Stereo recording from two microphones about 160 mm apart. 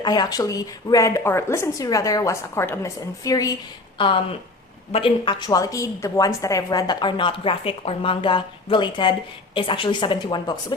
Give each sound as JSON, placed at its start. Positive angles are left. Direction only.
{"t": 0.0, "sound": "a woman's voice", "side_deg": 25}
{"t": 3.9, "sound": "a woman's voice", "side_deg": 30}